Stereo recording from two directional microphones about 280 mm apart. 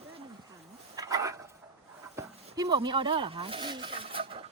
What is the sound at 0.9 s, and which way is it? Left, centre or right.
Dog, centre.